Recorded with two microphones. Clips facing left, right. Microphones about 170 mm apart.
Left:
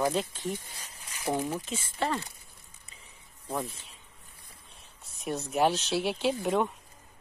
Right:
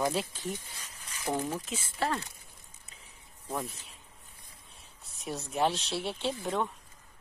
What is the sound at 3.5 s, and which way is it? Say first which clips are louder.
Speech: left 2 dB; centre (ahead or behind).